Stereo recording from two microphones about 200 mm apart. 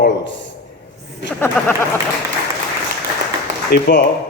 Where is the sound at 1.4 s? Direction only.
10° left (ahead or behind).